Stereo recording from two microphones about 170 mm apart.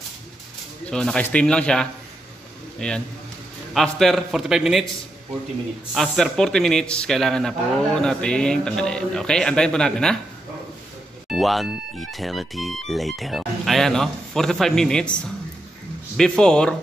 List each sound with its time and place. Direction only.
0.8 s speech: 5° left (ahead or behind)
5.9 s speech: centre (ahead or behind)
11.2 s speech: centre (ahead or behind)